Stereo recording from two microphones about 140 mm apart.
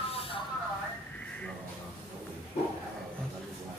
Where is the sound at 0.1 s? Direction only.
40° left (ahead or behind).